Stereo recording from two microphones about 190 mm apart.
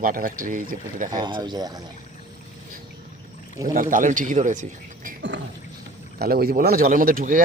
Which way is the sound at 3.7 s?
45° right (ahead or behind).